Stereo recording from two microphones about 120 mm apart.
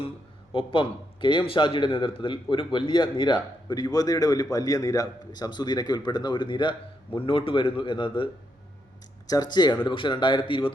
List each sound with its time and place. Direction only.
0.5 s a man's voice: 45° left (ahead or behind)
9.2 s a man's voice: 30° left (ahead or behind)